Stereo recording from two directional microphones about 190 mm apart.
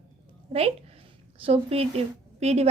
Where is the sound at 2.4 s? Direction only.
35° right (ahead or behind).